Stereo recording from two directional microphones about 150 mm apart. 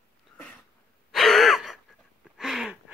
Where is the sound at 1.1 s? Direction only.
Centre (ahead or behind).